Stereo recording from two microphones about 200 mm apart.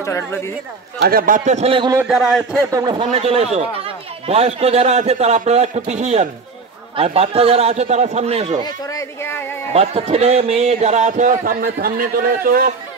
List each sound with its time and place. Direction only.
0.0 s speech: 15° left (ahead or behind)
1.0 s speech: 45° right (ahead or behind); by 2.0 s 25° right (ahead or behind)
2.0 s a man's voice: 5° right (ahead or behind)
2.7 s speech: 20° right (ahead or behind)
8.6 s speech: 15° left (ahead or behind)
9.7 s speech: 30° right (ahead or behind); by 12.7 s 45° right (ahead or behind)